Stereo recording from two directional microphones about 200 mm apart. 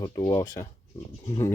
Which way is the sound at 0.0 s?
20° left (ahead or behind).